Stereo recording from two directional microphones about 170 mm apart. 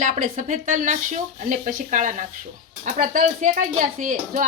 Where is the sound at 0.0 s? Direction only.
50° right (ahead or behind).